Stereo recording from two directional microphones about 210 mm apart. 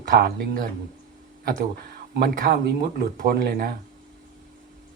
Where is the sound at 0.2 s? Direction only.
45° right (ahead or behind).